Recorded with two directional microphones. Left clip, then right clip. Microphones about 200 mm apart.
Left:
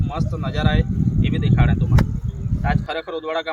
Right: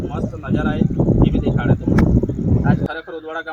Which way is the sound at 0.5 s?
20° left (ahead or behind).